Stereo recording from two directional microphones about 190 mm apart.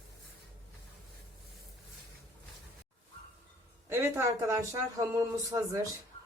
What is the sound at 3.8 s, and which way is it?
Speech, 15° right (ahead or behind).